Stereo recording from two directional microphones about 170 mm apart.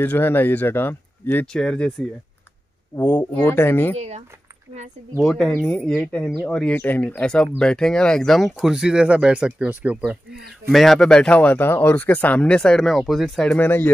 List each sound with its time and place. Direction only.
0.0 s speech: 10° left (ahead or behind)
3.9 s speech: 40° right (ahead or behind)
5.2 s speech: 5° left (ahead or behind)